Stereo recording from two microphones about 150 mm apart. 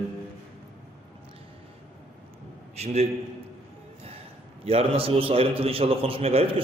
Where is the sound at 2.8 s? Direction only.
45° right (ahead or behind).